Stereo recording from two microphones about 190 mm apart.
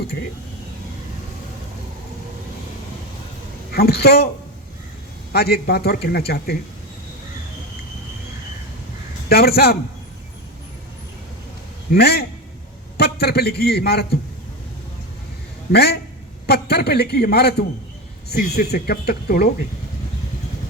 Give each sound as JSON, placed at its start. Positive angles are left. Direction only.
{"t": 3.7, "sound": "a man's voice", "side_deg": 55}
{"t": 5.3, "sound": "a man's voice", "side_deg": 55}
{"t": 9.3, "sound": "a man's voice", "side_deg": 55}
{"t": 11.9, "sound": "a man's voice", "side_deg": 55}
{"t": 15.7, "sound": "a man's voice", "side_deg": 55}